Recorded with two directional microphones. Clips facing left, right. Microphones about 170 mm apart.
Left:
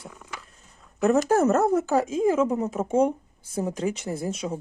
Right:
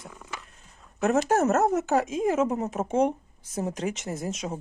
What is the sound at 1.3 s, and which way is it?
Speech, 35° left (ahead or behind).